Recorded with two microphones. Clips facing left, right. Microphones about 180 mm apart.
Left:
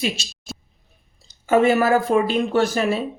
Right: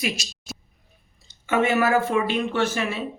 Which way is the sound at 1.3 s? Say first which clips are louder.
Left 5 dB; 35° left (ahead or behind).